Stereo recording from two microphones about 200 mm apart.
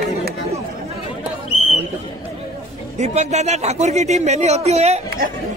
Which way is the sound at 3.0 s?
35° right (ahead or behind).